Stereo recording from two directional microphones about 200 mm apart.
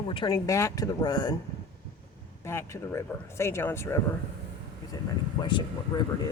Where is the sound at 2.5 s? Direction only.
15° left (ahead or behind).